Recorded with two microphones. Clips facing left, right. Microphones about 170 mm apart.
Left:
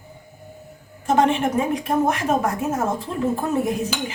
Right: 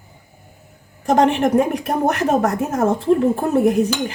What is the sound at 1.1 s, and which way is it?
A woman's voice, 70° right (ahead or behind).